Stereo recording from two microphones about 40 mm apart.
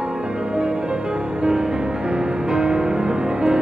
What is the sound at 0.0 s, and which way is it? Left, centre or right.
Music, right.